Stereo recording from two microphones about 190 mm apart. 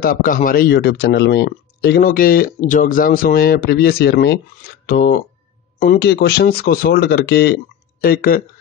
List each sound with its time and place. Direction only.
0.0 s speech: 45° left (ahead or behind)